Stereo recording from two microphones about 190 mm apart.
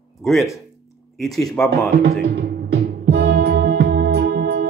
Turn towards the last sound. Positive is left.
turn(degrees=-50)  # may be behind; listen again after turning